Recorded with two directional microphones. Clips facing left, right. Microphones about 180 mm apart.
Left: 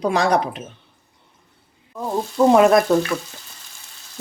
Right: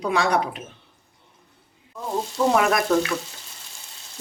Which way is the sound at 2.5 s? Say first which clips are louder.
Left 8 dB; 25° left (ahead or behind).